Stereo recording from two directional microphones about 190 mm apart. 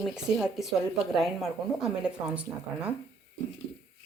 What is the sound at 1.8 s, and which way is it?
Speech, 5° right (ahead or behind).